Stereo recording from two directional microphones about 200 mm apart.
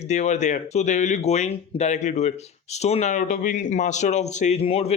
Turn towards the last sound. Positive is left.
turn(degrees=30)  # may be behind; listen again after turning